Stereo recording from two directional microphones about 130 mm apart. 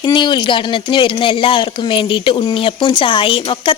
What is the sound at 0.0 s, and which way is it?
Speech, 35° left (ahead or behind).